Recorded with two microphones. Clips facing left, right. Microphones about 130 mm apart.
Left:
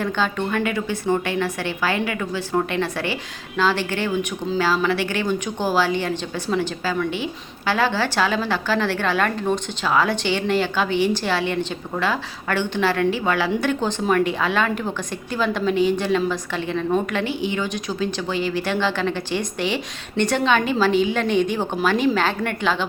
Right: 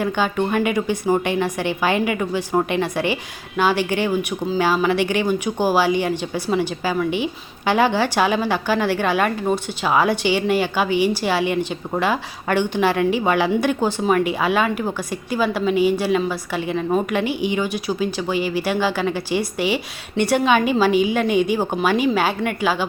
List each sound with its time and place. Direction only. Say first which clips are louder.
0.0 s a woman's voice: right 3 dB; 15° right (ahead or behind)